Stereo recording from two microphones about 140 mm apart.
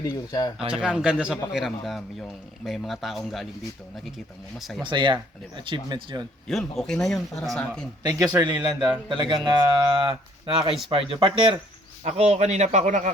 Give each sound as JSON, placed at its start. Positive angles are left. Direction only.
{"t": 0.0, "sound": "speech", "side_deg": 25}
{"t": 0.7, "sound": "a man's voice", "side_deg": -5}
{"t": 4.5, "sound": "a man's voice", "side_deg": 0}
{"t": 4.8, "sound": "speech", "side_deg": -35}
{"t": 6.5, "sound": "a man's voice", "side_deg": 5}
{"t": 8.0, "sound": "speech", "side_deg": -30}
{"t": 12.0, "sound": "speech", "side_deg": -55}